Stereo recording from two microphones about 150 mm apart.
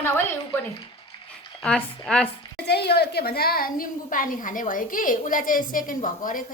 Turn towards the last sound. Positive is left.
turn(degrees=65)  # may be behind; listen again after turning